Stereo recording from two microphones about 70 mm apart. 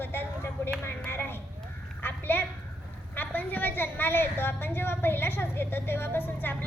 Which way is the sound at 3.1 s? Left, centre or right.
Left.